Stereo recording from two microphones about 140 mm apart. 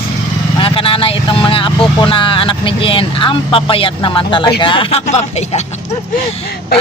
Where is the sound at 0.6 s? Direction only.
40° left (ahead or behind).